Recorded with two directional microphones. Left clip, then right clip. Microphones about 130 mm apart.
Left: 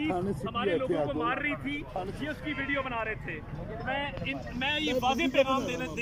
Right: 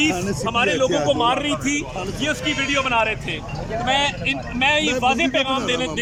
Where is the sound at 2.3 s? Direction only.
5° left (ahead or behind).